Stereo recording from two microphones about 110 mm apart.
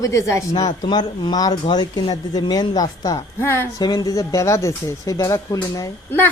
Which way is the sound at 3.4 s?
25° left (ahead or behind).